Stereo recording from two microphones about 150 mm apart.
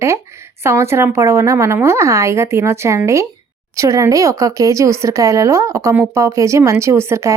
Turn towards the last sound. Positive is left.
turn(degrees=-15)  # may be behind; listen again after turning